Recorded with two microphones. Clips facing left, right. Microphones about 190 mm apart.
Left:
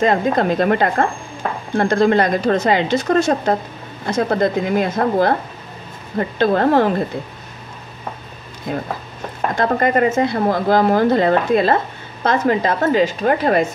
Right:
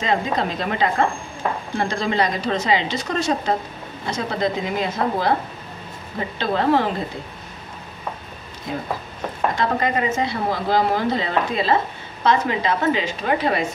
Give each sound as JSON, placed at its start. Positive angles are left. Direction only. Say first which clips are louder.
{"t": 0.0, "sound": "a woman's voice", "louder": "left 6 dB", "side_deg": 50}
{"t": 8.7, "sound": "a woman's voice", "louder": "left 3 dB", "side_deg": 55}